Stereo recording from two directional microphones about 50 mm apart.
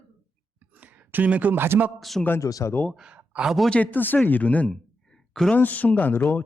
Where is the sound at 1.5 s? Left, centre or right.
Right.